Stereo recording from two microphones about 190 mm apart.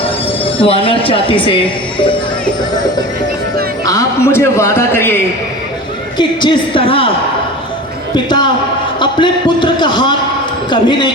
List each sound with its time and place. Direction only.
0.6 s speech: 30° left (ahead or behind)
3.8 s a man's voice: 15° left (ahead or behind)
6.1 s speech: 25° left (ahead or behind)
8.1 s a sound: 25° left (ahead or behind)
9.0 s speech: 25° left (ahead or behind)